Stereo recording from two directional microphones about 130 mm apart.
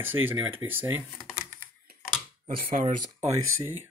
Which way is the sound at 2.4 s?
90° right.